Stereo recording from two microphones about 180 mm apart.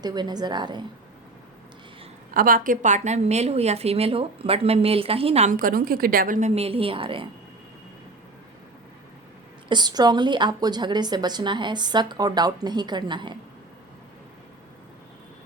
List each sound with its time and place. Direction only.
0.0 s a woman's voice: 25° right (ahead or behind)
2.3 s a woman's voice: 50° right (ahead or behind); by 7.3 s 30° right (ahead or behind)
9.6 s a woman's voice: 25° right (ahead or behind)